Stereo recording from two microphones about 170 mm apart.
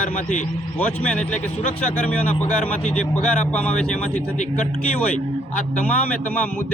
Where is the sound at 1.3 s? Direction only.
45° left (ahead or behind).